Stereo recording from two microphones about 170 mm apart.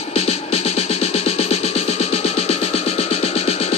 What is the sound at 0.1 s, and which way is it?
Music, 35° left (ahead or behind).